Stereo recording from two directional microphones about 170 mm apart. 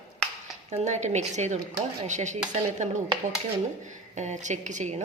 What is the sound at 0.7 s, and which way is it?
A woman's voice, 40° right (ahead or behind).